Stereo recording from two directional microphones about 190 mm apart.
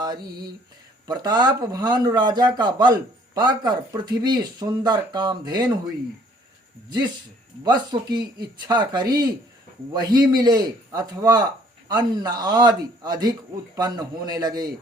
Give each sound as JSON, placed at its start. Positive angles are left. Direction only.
{"t": 0.0, "sound": "mantra", "side_deg": -20}
{"t": 1.0, "sound": "speech", "side_deg": -20}
{"t": 7.6, "sound": "speech", "side_deg": -20}